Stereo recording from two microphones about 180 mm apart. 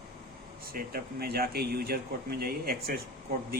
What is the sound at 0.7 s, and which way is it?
Speech, 55° right (ahead or behind).